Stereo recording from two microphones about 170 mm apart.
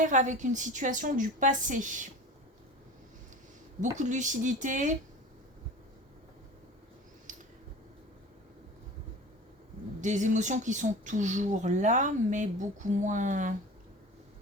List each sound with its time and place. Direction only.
0.0 s speech: 45° right (ahead or behind)
3.8 s speech: 45° right (ahead or behind)
7.3 s a sound: 50° right (ahead or behind)
10.0 s speech: 45° right (ahead or behind)